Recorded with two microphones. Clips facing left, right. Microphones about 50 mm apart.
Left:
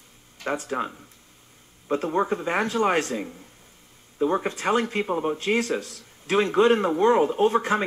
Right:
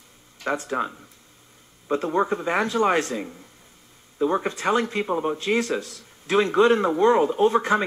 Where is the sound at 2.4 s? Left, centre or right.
Left.